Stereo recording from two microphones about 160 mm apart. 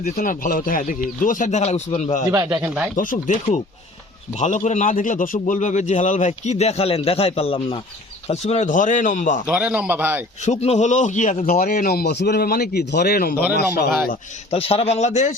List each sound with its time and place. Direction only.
0.0 s speech: 65° left (ahead or behind); by 2.2 s 45° left (ahead or behind)
2.3 s speech: 20° right (ahead or behind)
2.6 s speech: 10° right (ahead or behind)
2.9 s a man's voice: 55° left (ahead or behind)
9.5 s speech: 10° right (ahead or behind)
10.4 s a man's voice: 45° left (ahead or behind)
11.6 s speech: 70° left (ahead or behind)
13.6 s speech: 90° left
14.5 s a man's voice: 40° left (ahead or behind)